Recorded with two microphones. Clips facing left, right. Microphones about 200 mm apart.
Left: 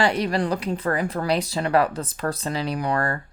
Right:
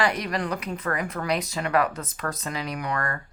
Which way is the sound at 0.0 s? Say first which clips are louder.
Left 4 dB; 30° left (ahead or behind).